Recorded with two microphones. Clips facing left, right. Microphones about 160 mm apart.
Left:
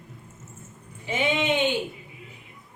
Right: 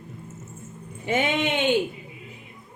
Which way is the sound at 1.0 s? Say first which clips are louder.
Right 2 dB; 55° right (ahead or behind).